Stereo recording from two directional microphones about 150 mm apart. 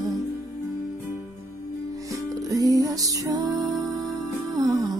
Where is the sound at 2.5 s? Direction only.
25° right (ahead or behind).